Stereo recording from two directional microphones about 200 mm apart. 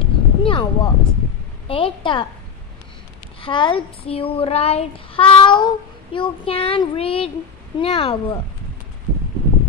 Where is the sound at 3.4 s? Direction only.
25° left (ahead or behind).